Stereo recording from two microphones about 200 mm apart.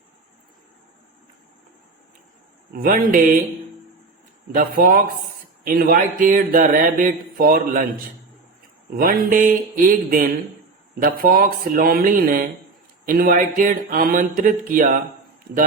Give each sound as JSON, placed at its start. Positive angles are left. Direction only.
{"t": 2.7, "sound": "speech", "side_deg": -45}
{"t": 4.5, "sound": "speech", "side_deg": -45}
{"t": 8.9, "sound": "speech", "side_deg": -45}